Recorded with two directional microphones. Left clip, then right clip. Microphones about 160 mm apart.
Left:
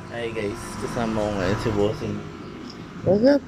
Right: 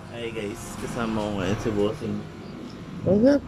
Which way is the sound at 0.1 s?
10° right (ahead or behind).